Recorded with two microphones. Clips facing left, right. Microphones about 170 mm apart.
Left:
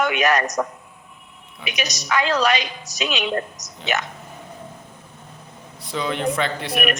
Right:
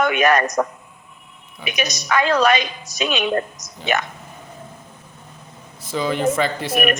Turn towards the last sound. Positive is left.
turn(degrees=0)  # may be behind; listen again after turning